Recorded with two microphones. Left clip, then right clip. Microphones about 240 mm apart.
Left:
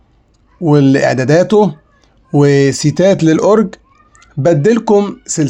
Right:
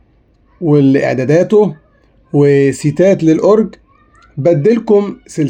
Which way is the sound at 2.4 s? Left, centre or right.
Left.